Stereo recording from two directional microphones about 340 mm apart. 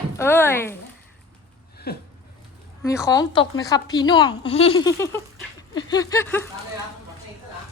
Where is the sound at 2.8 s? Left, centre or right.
Centre.